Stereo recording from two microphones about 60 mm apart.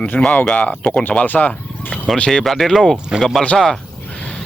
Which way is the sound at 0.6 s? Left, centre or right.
Left.